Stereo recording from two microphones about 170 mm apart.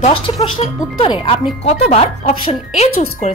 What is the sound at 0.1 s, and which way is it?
Speech, 35° left (ahead or behind).